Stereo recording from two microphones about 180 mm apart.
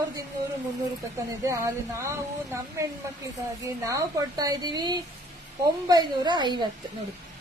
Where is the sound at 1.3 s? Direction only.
15° right (ahead or behind).